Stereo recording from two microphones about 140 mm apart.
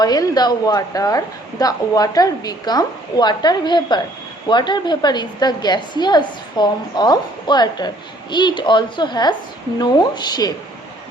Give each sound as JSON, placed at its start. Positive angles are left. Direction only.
{"t": 0.0, "sound": "a woman's voice", "side_deg": 30}